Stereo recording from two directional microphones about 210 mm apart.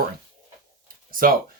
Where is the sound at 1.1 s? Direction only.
40° right (ahead or behind).